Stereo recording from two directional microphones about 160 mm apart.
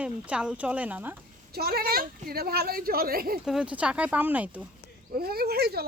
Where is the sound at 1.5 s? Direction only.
75° right (ahead or behind).